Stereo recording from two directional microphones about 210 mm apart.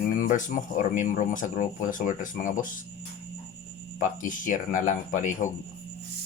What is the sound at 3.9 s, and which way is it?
Speech, 40° left (ahead or behind).